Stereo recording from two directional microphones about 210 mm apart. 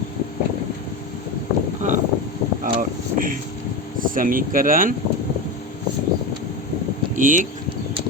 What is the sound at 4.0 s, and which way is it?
Speech, 40° right (ahead or behind).